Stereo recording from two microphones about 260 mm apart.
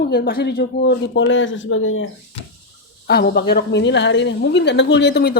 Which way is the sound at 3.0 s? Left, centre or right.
Left.